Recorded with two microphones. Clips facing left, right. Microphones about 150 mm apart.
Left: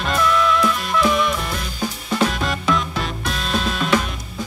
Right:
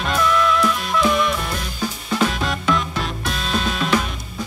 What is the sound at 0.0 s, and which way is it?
Music, centre (ahead or behind).